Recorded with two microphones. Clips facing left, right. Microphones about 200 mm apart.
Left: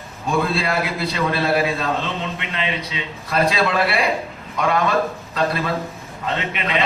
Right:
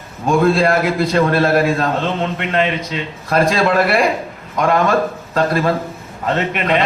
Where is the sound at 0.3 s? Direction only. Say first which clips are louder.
Right 8 dB; 45° right (ahead or behind).